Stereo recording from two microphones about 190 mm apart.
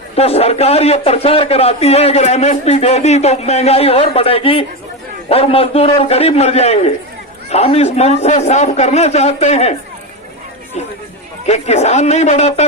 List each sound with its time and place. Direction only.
0.2 s a man's voice: 35° left (ahead or behind)
11.4 s a man's voice: 35° left (ahead or behind)